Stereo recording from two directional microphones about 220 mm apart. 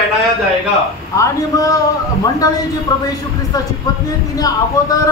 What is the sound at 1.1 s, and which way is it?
Speech, 15° left (ahead or behind).